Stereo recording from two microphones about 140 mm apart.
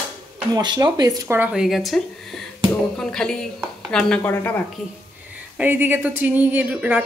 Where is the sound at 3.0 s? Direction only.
5° left (ahead or behind).